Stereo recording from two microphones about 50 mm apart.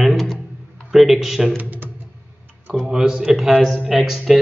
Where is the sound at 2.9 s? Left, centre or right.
Centre.